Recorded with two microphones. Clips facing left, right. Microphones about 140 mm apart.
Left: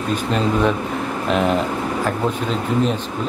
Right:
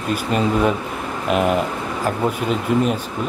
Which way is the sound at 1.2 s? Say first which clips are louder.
Right 1 dB; 5° right (ahead or behind).